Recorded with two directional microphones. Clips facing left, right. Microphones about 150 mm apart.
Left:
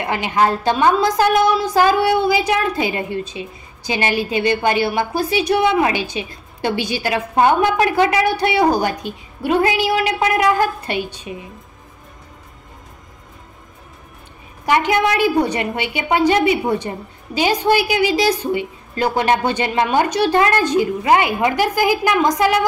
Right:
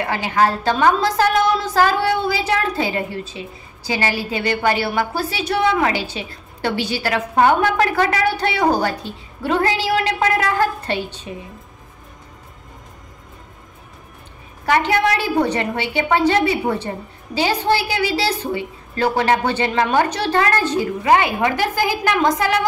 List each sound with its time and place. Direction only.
0.0 s a woman's voice: 20° left (ahead or behind)
14.7 s a woman's voice: 15° left (ahead or behind)